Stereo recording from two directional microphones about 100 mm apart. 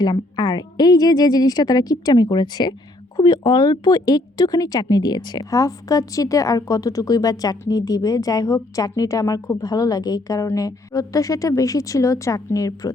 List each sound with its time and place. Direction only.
0.0 s a woman's voice: 45° left (ahead or behind)
5.5 s a woman's voice: 35° left (ahead or behind)